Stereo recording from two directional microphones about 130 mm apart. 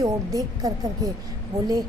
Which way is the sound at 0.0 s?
25° right (ahead or behind).